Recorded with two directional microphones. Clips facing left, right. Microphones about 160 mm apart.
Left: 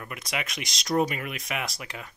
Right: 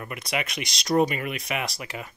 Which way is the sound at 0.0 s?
Centre (ahead or behind).